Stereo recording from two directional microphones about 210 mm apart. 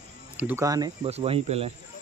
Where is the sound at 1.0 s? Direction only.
30° right (ahead or behind).